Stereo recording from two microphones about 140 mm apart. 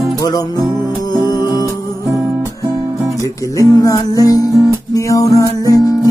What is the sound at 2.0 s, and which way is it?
Music, 25° right (ahead or behind).